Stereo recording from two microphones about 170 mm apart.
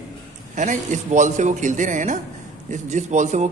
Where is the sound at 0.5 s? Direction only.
45° right (ahead or behind).